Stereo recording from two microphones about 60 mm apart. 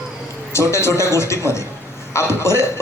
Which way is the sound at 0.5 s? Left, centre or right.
Left.